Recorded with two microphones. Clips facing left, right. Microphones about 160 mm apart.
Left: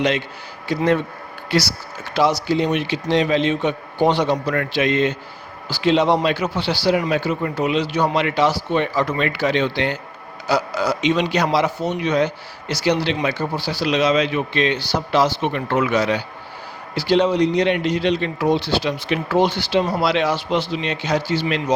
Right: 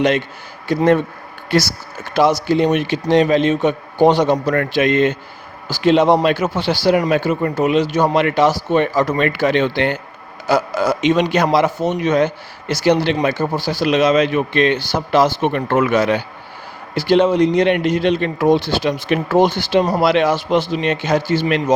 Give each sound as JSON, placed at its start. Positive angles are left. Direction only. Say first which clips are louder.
{"t": 0.7, "sound": "a man's voice", "louder": "right 4 dB", "side_deg": -50}